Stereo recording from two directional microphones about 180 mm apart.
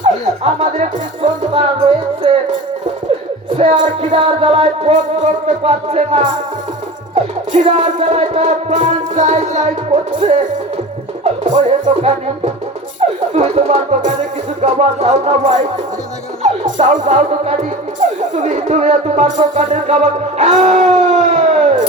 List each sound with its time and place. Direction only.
0.0 s speech: 35° right (ahead or behind)
4.1 s music: 30° right (ahead or behind)
7.5 s music: 40° right (ahead or behind)
13.0 s speech: 35° right (ahead or behind)
14.6 s music: 35° right (ahead or behind)